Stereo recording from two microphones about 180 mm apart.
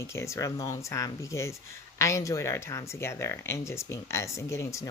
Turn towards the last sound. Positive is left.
turn(degrees=15)  # may be behind; listen again after turning